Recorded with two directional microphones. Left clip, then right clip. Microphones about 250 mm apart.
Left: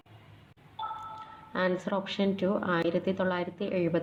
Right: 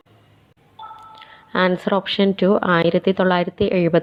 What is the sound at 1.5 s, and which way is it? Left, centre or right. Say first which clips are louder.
Speech: right 11 dB; right.